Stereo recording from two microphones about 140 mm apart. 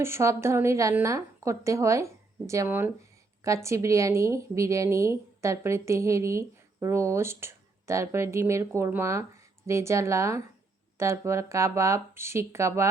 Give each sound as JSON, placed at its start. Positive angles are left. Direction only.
{"t": 0.0, "sound": "a woman's voice", "side_deg": -20}